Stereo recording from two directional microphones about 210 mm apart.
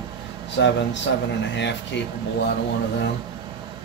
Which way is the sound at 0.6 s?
55° left (ahead or behind).